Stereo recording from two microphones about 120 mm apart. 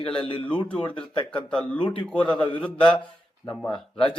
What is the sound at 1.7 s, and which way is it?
Speech, 45° left (ahead or behind).